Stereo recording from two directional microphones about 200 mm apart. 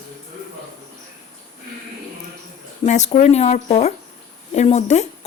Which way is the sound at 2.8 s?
35° left (ahead or behind).